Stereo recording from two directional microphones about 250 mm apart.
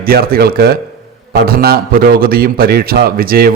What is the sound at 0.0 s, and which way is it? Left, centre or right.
A man's voice, right.